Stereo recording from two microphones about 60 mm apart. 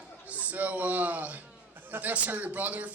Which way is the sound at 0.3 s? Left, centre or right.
Right.